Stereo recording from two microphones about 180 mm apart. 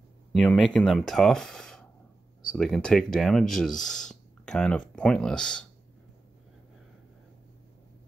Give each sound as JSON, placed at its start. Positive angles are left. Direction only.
{"t": 0.3, "sound": "speech", "side_deg": 0}